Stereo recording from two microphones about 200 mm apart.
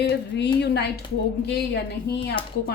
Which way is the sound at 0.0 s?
55° left (ahead or behind).